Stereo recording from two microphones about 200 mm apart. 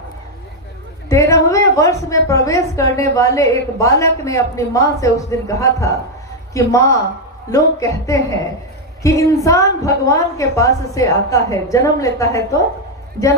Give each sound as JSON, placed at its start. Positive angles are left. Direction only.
{"t": 1.1, "sound": "a woman's voice", "side_deg": 15}